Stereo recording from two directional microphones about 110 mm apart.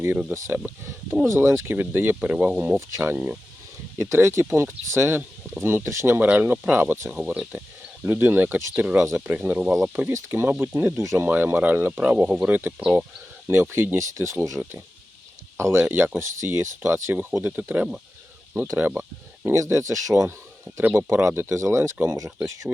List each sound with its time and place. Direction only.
0.3 s speech: 25° right (ahead or behind)
10.1 s speech: 25° right (ahead or behind); by 13.1 s 10° right (ahead or behind)
13.5 s speech: 20° right (ahead or behind)
14.6 s speech: 15° right (ahead or behind)